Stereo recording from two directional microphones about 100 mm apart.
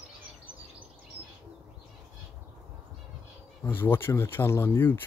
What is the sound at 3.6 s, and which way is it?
Speech, 20° left (ahead or behind).